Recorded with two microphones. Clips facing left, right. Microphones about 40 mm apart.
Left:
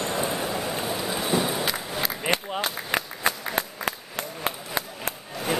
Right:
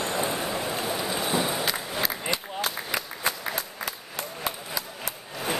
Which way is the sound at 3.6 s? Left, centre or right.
Left.